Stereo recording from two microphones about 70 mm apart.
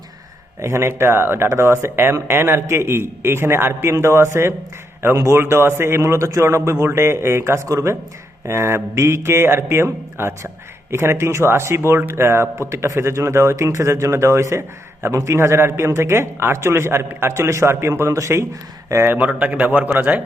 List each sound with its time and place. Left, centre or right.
0.6 s speech: right
19.3 s a man's voice: right